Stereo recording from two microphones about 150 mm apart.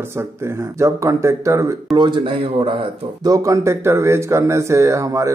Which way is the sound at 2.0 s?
35° right (ahead or behind).